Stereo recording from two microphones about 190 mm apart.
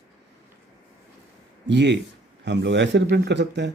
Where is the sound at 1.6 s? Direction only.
65° right (ahead or behind).